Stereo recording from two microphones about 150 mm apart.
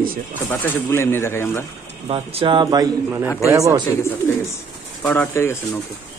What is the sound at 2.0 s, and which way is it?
Speech, 40° right (ahead or behind).